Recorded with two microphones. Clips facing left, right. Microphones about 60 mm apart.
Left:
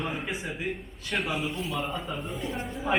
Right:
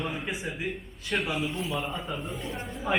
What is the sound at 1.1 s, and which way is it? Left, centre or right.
Speech, centre.